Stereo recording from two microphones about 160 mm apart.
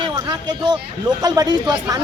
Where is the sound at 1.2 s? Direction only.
25° right (ahead or behind).